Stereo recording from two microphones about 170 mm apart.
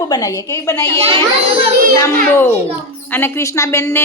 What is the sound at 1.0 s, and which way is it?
Speech, 35° right (ahead or behind).